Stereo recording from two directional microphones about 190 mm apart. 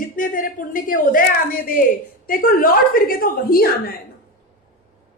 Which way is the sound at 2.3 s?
50° left (ahead or behind).